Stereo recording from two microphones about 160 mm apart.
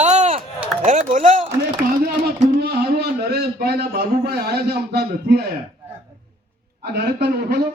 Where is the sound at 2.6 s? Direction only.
90° right.